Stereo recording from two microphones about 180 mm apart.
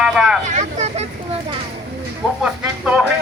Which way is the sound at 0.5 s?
40° right (ahead or behind).